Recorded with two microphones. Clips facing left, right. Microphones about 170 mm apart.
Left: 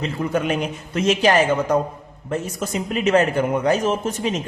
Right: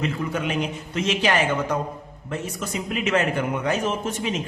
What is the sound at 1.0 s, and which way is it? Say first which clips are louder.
Speech: left 5 dB; 40° left (ahead or behind).